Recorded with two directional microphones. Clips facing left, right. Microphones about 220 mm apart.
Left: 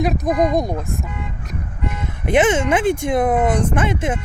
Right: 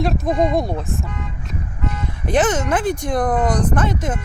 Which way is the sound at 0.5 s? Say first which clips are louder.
Left 1 dB; 15° left (ahead or behind).